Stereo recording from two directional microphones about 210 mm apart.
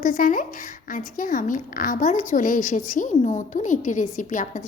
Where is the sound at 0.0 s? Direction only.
40° left (ahead or behind).